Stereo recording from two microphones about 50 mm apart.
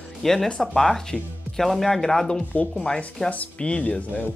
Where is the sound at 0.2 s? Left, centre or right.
Centre.